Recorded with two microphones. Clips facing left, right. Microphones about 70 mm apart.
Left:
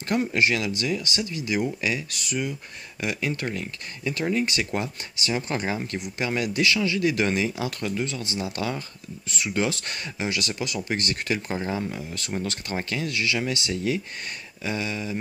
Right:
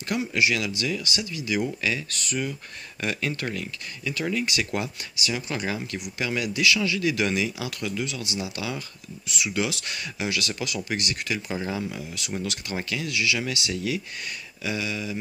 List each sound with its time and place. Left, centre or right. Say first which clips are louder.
0.3 s speech: left 1 dB; left